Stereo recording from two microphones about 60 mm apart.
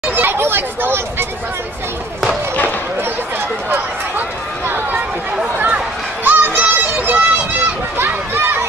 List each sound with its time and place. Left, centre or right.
0.1 s speech: right
6.2 s children playing: right
8.0 s a sound: right